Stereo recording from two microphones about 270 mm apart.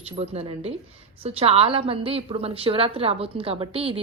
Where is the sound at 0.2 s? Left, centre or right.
Right.